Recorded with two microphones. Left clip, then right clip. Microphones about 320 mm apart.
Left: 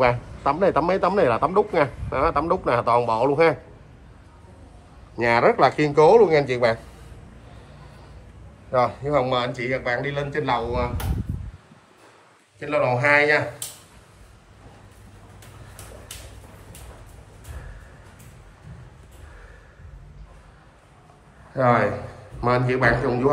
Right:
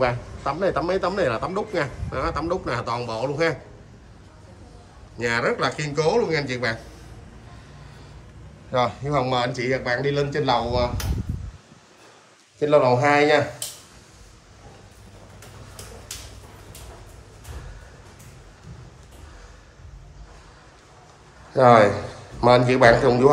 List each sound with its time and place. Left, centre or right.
0.0 s a man's voice: left
5.1 s speech: centre
8.7 s a man's voice: centre
12.5 s a man's voice: centre
21.5 s a man's voice: centre